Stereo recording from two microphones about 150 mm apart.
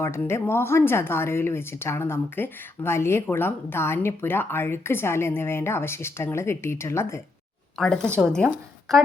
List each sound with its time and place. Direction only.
0.0 s speech: 15° left (ahead or behind)
7.8 s speech: 5° left (ahead or behind)